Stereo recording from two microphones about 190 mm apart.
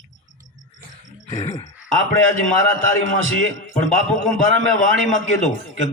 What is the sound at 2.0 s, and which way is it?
A man's voice, 90° right.